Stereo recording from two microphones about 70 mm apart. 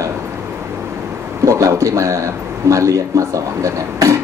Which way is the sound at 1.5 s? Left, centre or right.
Right.